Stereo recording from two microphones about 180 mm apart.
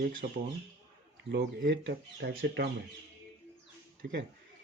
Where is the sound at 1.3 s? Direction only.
70° right (ahead or behind).